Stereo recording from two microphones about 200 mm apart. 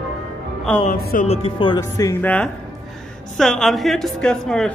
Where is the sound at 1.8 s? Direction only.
15° left (ahead or behind).